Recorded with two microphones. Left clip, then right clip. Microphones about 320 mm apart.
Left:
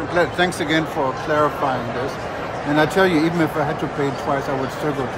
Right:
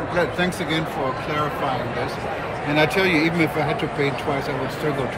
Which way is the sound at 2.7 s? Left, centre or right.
Centre.